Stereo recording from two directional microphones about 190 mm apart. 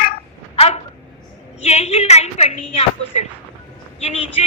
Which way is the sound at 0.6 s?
30° left (ahead or behind).